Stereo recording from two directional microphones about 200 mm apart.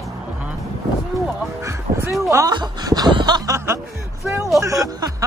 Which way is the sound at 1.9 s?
45° right (ahead or behind).